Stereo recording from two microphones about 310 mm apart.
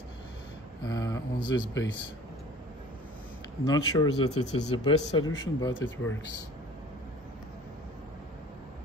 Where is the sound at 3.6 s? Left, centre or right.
Centre.